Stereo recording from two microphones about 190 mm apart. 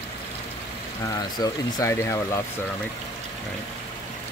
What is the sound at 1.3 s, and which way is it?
Speech, 20° left (ahead or behind).